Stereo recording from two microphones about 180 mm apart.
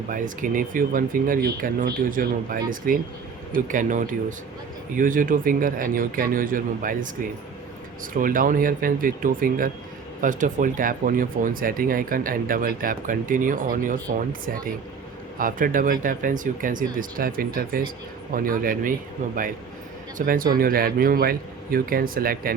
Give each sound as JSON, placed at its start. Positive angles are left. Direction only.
{"t": 0.1, "sound": "speech", "side_deg": -50}
{"t": 8.1, "sound": "speech", "side_deg": -50}
{"t": 15.4, "sound": "speech", "side_deg": -50}
{"t": 20.1, "sound": "speech", "side_deg": -50}